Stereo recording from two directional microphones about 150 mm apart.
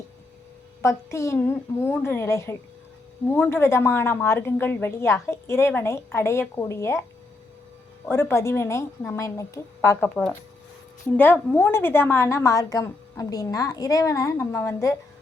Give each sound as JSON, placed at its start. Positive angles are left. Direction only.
{"t": 0.8, "sound": "a woman's voice", "side_deg": 20}
{"t": 8.0, "sound": "a woman's voice", "side_deg": 15}
{"t": 11.2, "sound": "a woman's voice", "side_deg": 15}